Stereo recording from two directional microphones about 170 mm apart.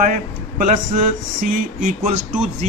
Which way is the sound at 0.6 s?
50° right (ahead or behind).